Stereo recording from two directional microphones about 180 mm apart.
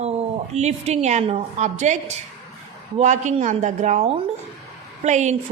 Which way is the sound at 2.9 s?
40° right (ahead or behind).